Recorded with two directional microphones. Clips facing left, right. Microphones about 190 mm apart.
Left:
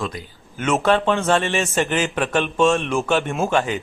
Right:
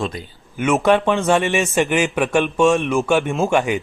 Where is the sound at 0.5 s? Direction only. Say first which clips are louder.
Right 3 dB; 10° right (ahead or behind).